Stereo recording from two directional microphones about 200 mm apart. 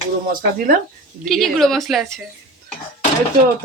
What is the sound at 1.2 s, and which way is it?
Speech, centre (ahead or behind).